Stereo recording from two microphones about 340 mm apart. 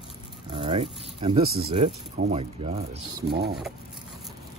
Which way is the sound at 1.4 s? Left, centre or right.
Right.